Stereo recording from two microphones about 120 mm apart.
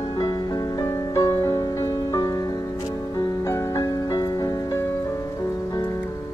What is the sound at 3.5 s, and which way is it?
Music, 25° left (ahead or behind).